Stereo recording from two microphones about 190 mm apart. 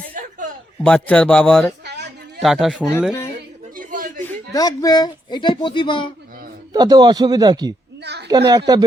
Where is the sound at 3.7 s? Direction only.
45° right (ahead or behind).